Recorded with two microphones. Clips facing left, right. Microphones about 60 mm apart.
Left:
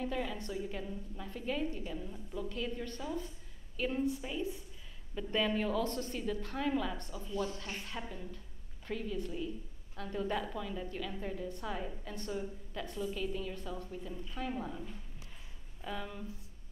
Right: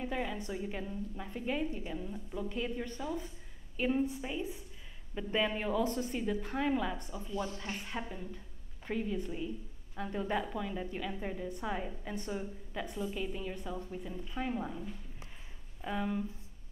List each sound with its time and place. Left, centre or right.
0.0 s a woman's voice: centre
15.8 s a woman's voice: centre